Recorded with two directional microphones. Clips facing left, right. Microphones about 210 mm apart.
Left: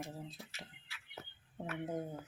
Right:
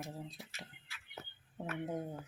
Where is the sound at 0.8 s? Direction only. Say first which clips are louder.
Even; 50° right (ahead or behind).